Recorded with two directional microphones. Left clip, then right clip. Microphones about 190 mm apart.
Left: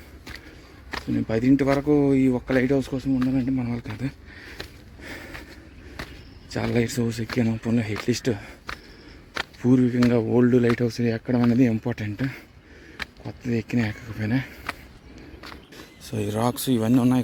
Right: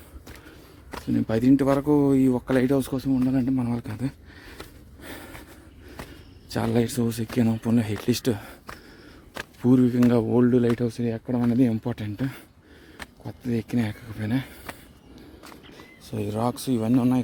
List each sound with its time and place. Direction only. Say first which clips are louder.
1.1 s speech: right 1 dB; 20° right (ahead or behind)
5.0 s snort: left 3 dB; 15° right (ahead or behind)
6.5 s speech: even; 15° right (ahead or behind)
9.6 s speech: right 1 dB; 15° right (ahead or behind); by 11.5 s 5° left (ahead or behind)
11.5 s speech: left 2 dB; 5° right (ahead or behind)